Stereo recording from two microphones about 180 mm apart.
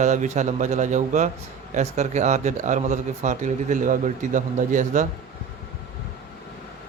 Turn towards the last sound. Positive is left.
turn(degrees=-45)  # may be behind; listen again after turning